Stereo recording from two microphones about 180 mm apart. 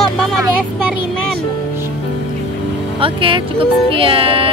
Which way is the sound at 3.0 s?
30° right (ahead or behind).